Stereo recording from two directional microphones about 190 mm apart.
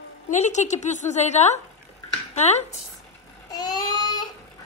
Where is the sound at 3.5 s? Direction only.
20° left (ahead or behind).